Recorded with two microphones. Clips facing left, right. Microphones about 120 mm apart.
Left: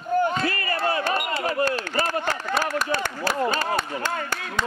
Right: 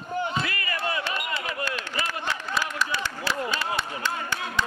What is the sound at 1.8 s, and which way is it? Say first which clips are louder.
Speech: left 6 dB; 45° left (ahead or behind).